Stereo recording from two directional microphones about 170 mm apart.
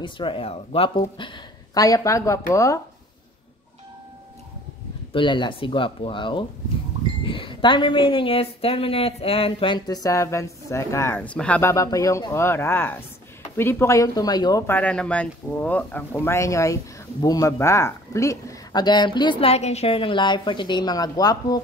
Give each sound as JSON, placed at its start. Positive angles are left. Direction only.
{"t": 0.0, "sound": "speech", "side_deg": 30}
{"t": 5.1, "sound": "speech", "side_deg": 30}
{"t": 11.7, "sound": "speech", "side_deg": 20}
{"t": 14.7, "sound": "speech", "side_deg": 10}